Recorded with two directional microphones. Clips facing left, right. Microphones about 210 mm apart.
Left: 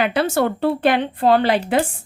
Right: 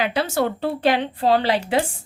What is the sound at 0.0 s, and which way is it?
A woman's voice, 55° left (ahead or behind).